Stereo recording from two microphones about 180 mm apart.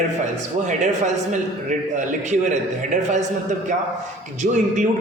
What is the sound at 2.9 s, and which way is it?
Music, 40° right (ahead or behind).